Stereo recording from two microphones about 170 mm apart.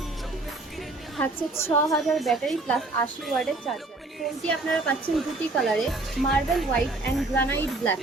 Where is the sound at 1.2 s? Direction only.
15° left (ahead or behind).